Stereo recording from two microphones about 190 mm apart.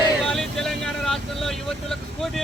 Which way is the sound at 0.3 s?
Centre (ahead or behind).